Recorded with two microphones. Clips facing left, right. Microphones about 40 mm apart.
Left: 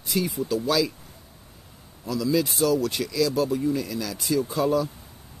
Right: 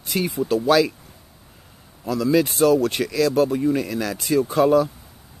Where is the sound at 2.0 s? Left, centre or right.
Right.